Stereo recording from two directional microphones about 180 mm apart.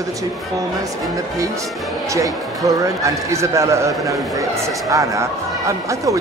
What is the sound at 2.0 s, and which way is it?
A man's voice, 20° right (ahead or behind).